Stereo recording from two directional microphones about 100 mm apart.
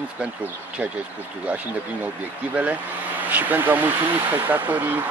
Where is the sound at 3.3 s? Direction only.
15° right (ahead or behind).